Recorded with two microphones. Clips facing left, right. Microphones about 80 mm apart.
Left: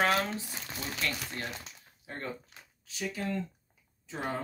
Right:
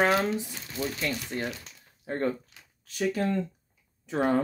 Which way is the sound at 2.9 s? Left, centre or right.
Right.